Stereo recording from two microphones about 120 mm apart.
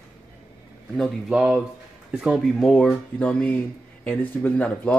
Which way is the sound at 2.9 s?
10° left (ahead or behind).